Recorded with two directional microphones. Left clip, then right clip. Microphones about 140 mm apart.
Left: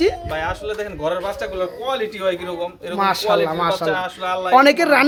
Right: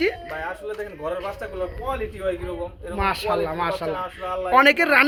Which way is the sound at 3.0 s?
20° right (ahead or behind).